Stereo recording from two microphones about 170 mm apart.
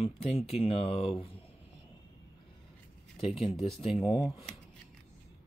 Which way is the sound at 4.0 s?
25° left (ahead or behind).